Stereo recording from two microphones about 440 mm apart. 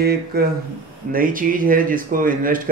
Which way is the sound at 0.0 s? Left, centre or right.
Right.